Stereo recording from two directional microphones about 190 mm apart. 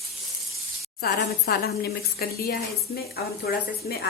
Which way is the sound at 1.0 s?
55° left (ahead or behind).